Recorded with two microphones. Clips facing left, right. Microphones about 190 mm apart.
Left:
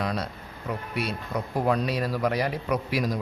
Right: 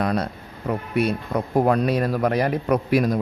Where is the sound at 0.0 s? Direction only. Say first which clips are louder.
Right 6 dB; 55° right (ahead or behind).